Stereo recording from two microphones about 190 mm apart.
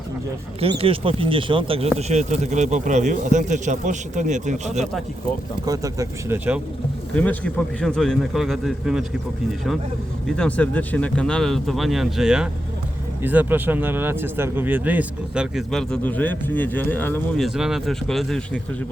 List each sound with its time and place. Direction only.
0.6 s speech: 30° right (ahead or behind)
5.6 s speech: 20° right (ahead or behind)
7.1 s speech: 5° left (ahead or behind)
10.2 s speech: 5° left (ahead or behind)